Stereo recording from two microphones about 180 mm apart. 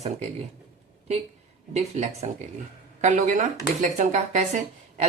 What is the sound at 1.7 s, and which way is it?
Speech, 40° right (ahead or behind).